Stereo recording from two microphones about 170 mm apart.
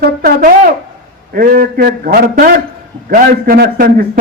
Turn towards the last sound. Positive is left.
turn(degrees=-60)  # may be behind; listen again after turning